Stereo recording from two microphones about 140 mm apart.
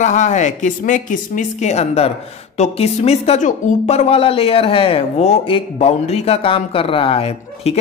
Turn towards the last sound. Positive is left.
turn(degrees=45)  # may be behind; listen again after turning